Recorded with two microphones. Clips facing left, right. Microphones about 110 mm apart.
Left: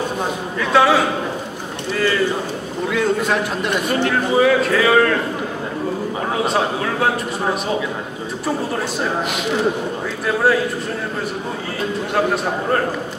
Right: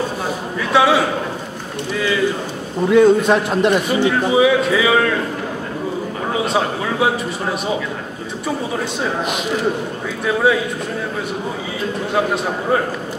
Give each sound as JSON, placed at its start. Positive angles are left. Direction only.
{"t": 0.6, "sound": "a man's voice", "side_deg": 0}
{"t": 2.9, "sound": "a man's voice", "side_deg": -25}
{"t": 3.9, "sound": "a man's voice", "side_deg": -10}
{"t": 6.4, "sound": "a man's voice", "side_deg": 0}
{"t": 10.2, "sound": "a man's voice", "side_deg": 0}